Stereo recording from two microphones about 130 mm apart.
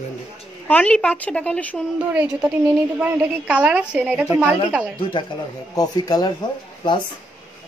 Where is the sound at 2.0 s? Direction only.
10° right (ahead or behind).